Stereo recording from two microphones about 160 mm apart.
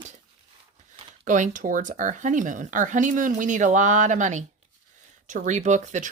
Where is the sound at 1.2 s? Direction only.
55° right (ahead or behind).